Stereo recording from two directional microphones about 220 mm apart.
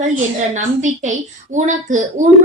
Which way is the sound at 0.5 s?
35° right (ahead or behind).